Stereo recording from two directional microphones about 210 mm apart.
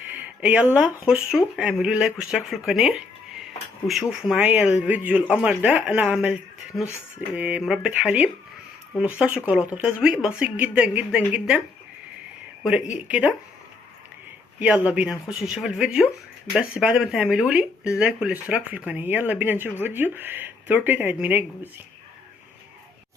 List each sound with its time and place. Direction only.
0.1 s a sound: 5° right (ahead or behind)
1.0 s speech: 5° right (ahead or behind)
2.6 s music: centre (ahead or behind)
3.8 s speech: centre (ahead or behind)
7.3 s speech: 5° right (ahead or behind)
13.1 s speech: 5° right (ahead or behind)
14.6 s speech: 5° right (ahead or behind)